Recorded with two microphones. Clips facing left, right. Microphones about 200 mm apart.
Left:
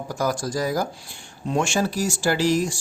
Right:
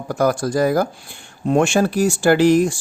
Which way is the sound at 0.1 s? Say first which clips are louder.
Right 7 dB; 60° right (ahead or behind).